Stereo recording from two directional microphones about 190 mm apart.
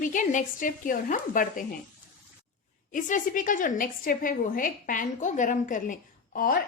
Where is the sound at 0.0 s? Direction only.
45° left (ahead or behind).